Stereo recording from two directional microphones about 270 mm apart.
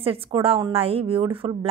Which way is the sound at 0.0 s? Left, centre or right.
Right.